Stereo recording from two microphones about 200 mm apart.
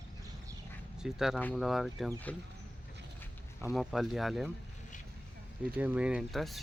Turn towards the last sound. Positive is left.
turn(degrees=0)  # may be behind; listen again after turning